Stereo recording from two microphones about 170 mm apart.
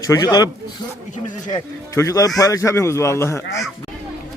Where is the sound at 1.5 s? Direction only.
20° left (ahead or behind).